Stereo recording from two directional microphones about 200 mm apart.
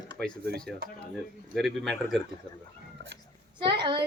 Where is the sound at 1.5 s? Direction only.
Centre (ahead or behind).